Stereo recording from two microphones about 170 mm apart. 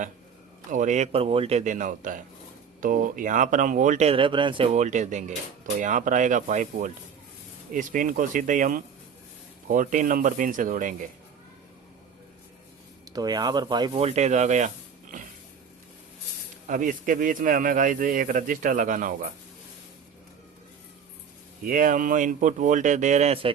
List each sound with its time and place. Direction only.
0.7 s speech: 45° right (ahead or behind); by 4.7 s 30° right (ahead or behind)
4.7 s speech: 45° right (ahead or behind)
13.1 s speech: 25° right (ahead or behind)
13.9 s speech: 40° right (ahead or behind)
16.6 s speech: 50° right (ahead or behind)
21.6 s speech: 55° right (ahead or behind); by 23.5 s 35° right (ahead or behind)